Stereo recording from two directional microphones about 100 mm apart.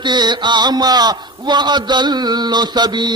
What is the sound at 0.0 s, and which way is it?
A man's voice, 50° right (ahead or behind).